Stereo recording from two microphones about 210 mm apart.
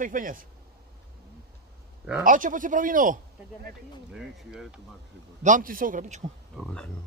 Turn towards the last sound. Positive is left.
turn(degrees=5)  # may be behind; listen again after turning